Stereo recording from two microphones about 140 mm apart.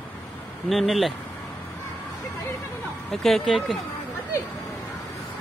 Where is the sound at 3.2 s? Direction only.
Centre (ahead or behind).